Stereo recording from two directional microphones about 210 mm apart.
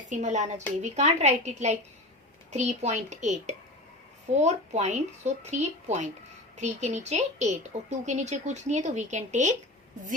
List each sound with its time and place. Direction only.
0.1 s a woman's voice: 35° right (ahead or behind)